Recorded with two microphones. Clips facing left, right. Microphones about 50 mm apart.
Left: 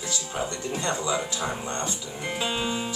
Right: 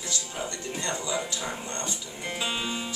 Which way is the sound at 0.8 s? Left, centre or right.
Centre.